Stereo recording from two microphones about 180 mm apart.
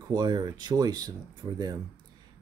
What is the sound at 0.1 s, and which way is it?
Speech, 25° right (ahead or behind).